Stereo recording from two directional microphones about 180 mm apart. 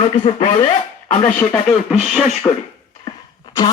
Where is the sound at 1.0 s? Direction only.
10° left (ahead or behind).